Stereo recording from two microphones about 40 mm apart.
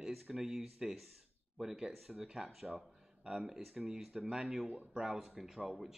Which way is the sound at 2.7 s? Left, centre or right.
Centre.